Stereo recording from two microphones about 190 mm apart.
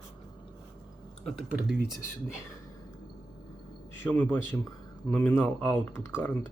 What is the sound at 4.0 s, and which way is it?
Speech, 10° left (ahead or behind).